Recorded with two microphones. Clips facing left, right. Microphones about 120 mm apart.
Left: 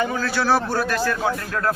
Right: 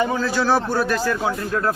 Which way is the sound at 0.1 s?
20° right (ahead or behind).